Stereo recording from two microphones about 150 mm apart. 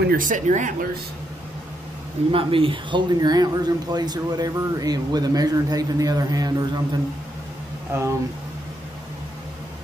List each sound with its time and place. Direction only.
0.0 s speech: 70° right (ahead or behind)
2.3 s speech: 35° right (ahead or behind)